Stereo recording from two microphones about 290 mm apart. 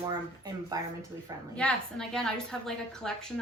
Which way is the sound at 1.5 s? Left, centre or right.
Centre.